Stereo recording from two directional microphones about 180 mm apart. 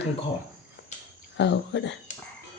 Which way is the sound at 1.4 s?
80° left.